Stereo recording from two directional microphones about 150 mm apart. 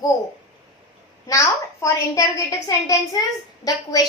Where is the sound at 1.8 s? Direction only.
20° left (ahead or behind).